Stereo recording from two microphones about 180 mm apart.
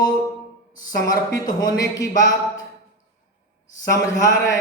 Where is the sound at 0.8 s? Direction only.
20° left (ahead or behind).